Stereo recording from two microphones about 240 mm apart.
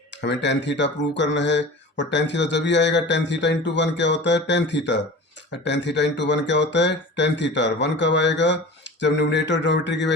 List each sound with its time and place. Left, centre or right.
0.2 s speech: left